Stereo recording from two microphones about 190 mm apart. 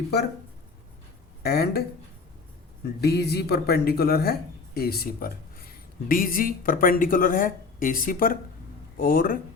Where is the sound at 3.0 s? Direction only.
60° left (ahead or behind).